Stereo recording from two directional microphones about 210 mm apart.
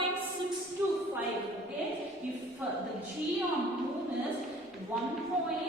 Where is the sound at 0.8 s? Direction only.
10° right (ahead or behind).